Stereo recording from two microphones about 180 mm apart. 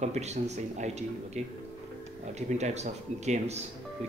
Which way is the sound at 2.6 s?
40° right (ahead or behind).